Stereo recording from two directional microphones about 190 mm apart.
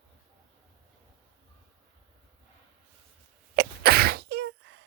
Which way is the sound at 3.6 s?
55° right (ahead or behind).